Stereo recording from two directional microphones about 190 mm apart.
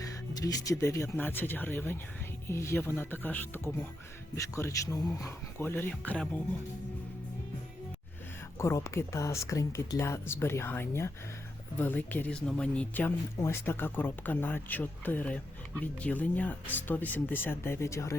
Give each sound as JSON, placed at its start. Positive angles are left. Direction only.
{"t": 0.3, "sound": "speech", "side_deg": 20}
{"t": 8.5, "sound": "speech", "side_deg": 15}